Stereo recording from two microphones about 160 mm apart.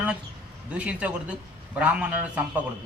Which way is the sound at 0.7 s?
10° right (ahead or behind).